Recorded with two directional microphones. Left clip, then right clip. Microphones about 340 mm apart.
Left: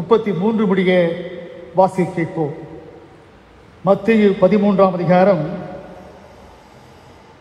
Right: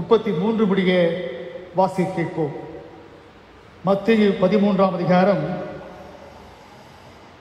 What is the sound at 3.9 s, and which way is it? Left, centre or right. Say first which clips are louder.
A man's voice: left 4 dB; left.